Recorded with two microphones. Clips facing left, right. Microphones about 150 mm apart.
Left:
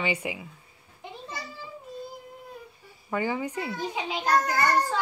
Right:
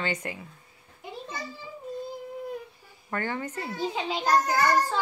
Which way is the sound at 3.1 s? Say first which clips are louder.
Left 3 dB; 10° left (ahead or behind).